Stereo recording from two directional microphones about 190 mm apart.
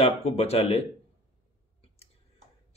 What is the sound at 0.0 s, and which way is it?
Speech, 30° left (ahead or behind).